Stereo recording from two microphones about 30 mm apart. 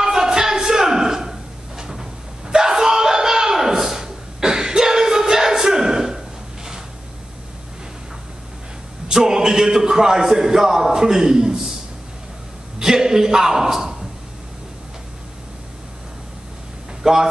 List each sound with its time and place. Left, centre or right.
0.0 s a sound: centre
1.8 s slap: centre
9.1 s a man's voice: centre
12.7 s a man's voice: right
17.0 s speech: centre